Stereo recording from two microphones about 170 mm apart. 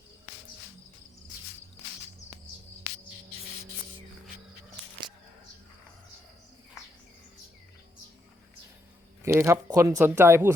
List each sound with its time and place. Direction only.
9.2 s speech: 15° right (ahead or behind)